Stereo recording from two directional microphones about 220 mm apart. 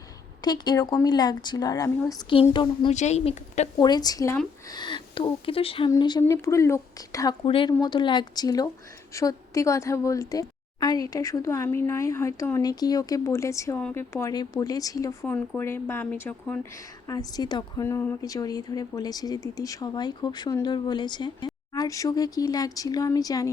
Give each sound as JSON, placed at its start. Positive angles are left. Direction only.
{"t": 0.4, "sound": "speech", "side_deg": 20}
{"t": 3.8, "sound": "speech", "side_deg": 20}